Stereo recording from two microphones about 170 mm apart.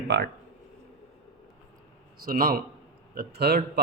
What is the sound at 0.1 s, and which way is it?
Speech, 90° right.